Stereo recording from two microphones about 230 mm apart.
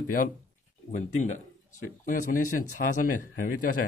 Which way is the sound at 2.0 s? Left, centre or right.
Left.